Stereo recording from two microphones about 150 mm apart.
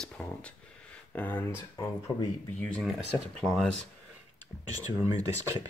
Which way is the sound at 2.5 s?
5° left (ahead or behind).